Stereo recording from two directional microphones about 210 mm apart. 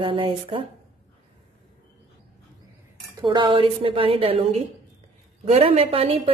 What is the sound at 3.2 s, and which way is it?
A woman's voice, 25° right (ahead or behind).